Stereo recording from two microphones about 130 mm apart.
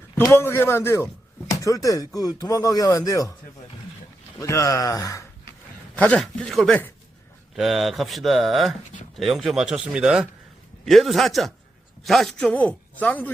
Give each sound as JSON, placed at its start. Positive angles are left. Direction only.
{"t": 0.2, "sound": "speech", "side_deg": 20}
{"t": 4.4, "sound": "speech", "side_deg": 25}
{"t": 5.9, "sound": "speech", "side_deg": 10}
{"t": 7.5, "sound": "a man's voice", "side_deg": 0}